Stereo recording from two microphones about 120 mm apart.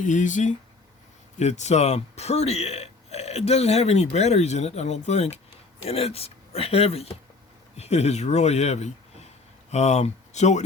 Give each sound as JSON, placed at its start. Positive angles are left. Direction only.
{"t": 0.0, "sound": "speech", "side_deg": 90}
{"t": 1.4, "sound": "speech", "side_deg": 70}